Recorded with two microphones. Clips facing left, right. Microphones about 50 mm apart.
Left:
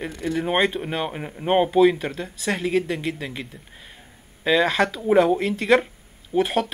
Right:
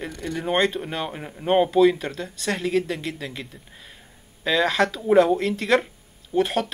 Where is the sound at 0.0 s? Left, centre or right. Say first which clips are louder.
Left 3 dB; centre.